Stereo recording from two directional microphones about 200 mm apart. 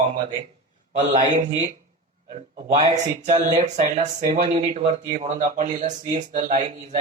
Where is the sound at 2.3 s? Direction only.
30° right (ahead or behind).